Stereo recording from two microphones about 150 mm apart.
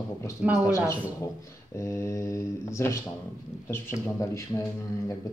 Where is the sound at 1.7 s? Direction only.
20° left (ahead or behind).